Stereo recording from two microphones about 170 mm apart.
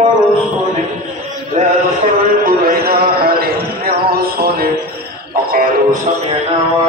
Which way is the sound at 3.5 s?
65° right (ahead or behind).